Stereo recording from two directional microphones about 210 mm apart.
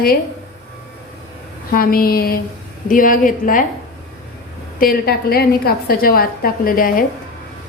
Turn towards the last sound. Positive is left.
turn(degrees=40)  # may be behind; listen again after turning